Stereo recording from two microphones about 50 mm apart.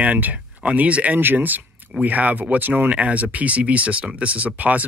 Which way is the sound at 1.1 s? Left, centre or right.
Right.